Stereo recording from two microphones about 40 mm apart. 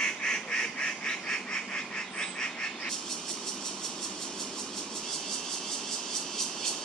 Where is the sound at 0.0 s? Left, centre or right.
Left.